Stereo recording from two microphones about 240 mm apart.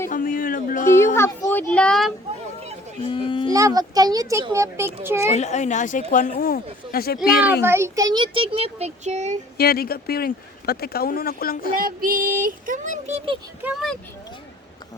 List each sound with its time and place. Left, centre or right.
0.1 s a sound: left
0.9 s speech: centre
3.1 s speech: left
3.5 s a child's voice: centre
5.3 s speech: left
7.6 s a child's voice: centre; by 9.4 s right
9.6 s speech: left
11.7 s child singing: right
13.6 s speech: centre